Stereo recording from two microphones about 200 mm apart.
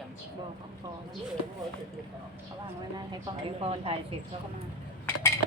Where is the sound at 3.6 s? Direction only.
30° right (ahead or behind).